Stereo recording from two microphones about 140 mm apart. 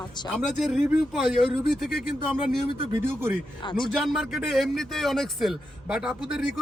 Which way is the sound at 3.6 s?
35° left (ahead or behind).